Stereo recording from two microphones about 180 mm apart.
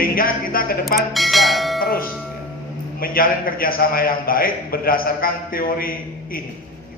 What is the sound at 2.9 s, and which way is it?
A man's voice, 55° left (ahead or behind).